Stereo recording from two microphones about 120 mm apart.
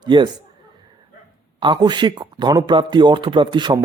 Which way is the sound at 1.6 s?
40° right (ahead or behind).